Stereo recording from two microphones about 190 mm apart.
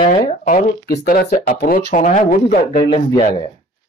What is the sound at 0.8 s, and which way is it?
Speech, 55° left (ahead or behind).